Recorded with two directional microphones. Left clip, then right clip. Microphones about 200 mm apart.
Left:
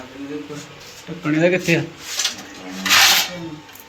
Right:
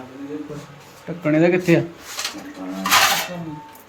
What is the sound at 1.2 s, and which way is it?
Speech, 15° right (ahead or behind).